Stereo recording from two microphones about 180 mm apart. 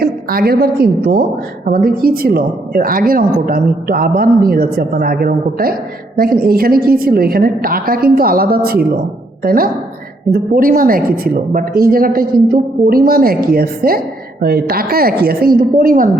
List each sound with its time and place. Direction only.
0.0 s a woman's voice: 60° right (ahead or behind)